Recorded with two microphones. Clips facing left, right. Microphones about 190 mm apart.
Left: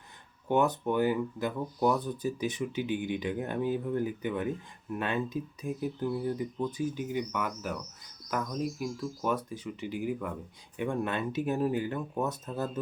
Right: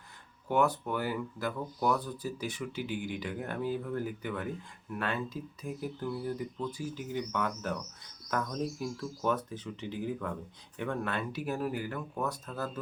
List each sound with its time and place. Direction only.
0.4 s speech: 20° left (ahead or behind)